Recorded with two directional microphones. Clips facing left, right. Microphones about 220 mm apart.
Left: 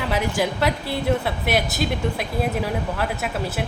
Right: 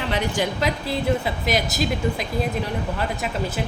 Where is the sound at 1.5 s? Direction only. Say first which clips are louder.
Even; centre (ahead or behind).